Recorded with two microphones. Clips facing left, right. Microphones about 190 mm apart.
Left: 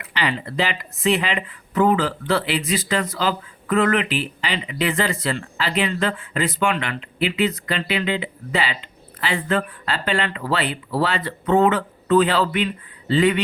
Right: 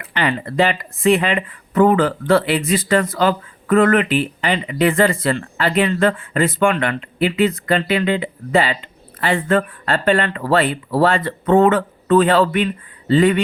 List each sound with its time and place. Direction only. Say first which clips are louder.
0.0 s speech: right 4 dB; 50° right (ahead or behind)